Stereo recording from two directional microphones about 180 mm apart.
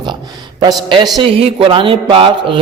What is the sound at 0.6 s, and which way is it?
A woman's voice, 25° right (ahead or behind).